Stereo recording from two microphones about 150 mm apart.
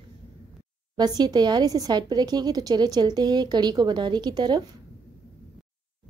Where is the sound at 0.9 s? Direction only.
25° right (ahead or behind).